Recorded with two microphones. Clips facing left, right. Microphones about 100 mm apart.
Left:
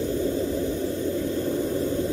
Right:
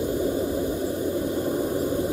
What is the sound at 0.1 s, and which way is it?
Vehicle, 15° right (ahead or behind).